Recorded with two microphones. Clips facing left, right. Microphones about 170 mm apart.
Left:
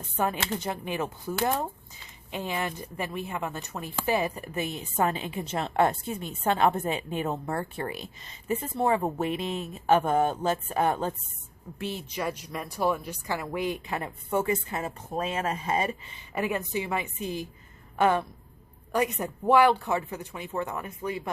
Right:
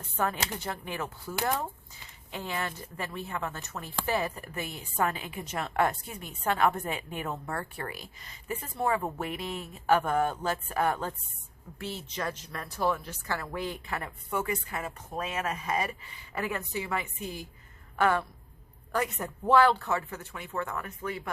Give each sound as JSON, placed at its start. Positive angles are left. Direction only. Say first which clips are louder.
{"t": 0.0, "sound": "a woman's voice", "louder": "left 2 dB", "side_deg": 15}